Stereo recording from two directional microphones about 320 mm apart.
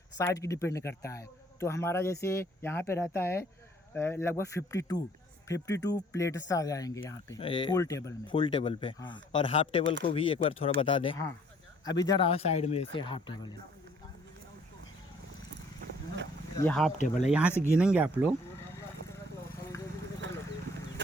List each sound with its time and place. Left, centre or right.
0.2 s speech: centre
16.6 s speech: centre
17.0 s speech: left
17.7 s speech: centre